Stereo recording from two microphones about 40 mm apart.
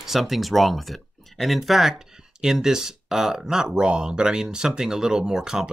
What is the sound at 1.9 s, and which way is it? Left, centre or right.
Speech, centre.